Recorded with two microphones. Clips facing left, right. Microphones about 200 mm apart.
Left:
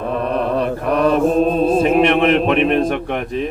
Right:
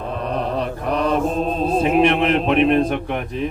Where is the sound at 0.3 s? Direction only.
60° left (ahead or behind).